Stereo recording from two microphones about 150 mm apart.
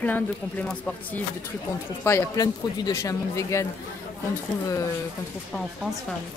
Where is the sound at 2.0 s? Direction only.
20° left (ahead or behind).